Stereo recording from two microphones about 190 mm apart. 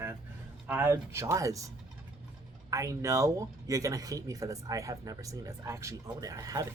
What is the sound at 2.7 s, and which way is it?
Speech, 15° right (ahead or behind).